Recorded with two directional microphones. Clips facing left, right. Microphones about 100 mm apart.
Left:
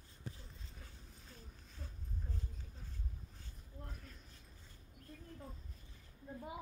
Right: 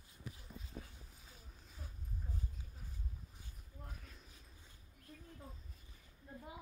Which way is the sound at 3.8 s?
Centre (ahead or behind).